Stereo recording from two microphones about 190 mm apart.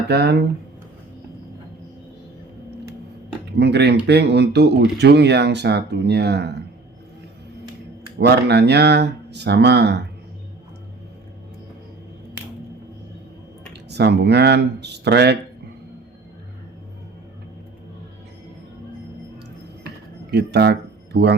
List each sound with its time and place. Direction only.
0.1 s speech: 60° right (ahead or behind)
3.6 s speech: 60° right (ahead or behind)
8.2 s speech: 60° right (ahead or behind)
13.9 s speech: 60° right (ahead or behind)
20.3 s speech: 60° right (ahead or behind)